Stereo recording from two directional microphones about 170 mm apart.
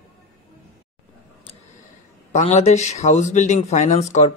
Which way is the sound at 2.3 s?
40° left (ahead or behind).